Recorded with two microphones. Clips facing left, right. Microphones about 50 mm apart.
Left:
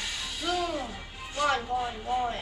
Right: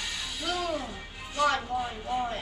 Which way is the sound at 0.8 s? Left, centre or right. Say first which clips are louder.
Even; centre.